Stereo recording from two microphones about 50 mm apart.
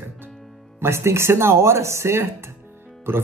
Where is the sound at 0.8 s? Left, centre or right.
Right.